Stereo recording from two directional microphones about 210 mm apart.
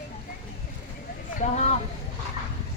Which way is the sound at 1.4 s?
35° left (ahead or behind).